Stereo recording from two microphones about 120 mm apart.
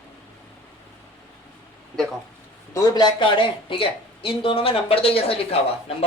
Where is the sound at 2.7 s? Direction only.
30° left (ahead or behind).